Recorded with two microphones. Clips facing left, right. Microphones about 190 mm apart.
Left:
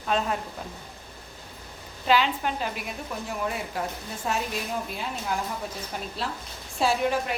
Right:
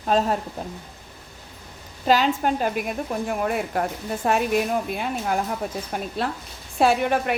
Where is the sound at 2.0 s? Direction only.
40° right (ahead or behind).